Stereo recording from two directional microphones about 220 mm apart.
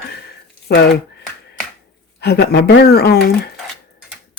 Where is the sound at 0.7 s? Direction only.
45° left (ahead or behind).